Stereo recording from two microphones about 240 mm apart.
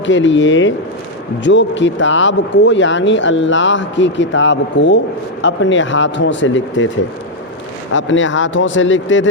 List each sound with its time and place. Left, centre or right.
0.0 s speech: left
7.9 s speech: left